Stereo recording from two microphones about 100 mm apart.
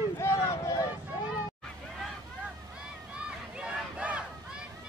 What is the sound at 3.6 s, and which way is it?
Crowd, 10° right (ahead or behind).